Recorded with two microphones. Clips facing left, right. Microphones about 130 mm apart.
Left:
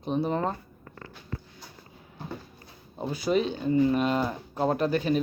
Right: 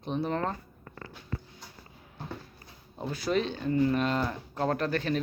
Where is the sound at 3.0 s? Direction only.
5° left (ahead or behind).